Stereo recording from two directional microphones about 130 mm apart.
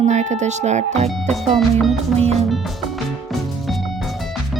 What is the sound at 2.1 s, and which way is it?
Speech, 55° right (ahead or behind).